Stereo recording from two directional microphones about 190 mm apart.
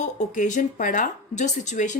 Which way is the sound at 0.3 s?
40° left (ahead or behind).